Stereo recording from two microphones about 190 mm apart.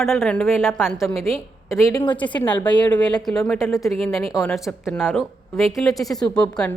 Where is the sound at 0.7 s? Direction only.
Centre (ahead or behind).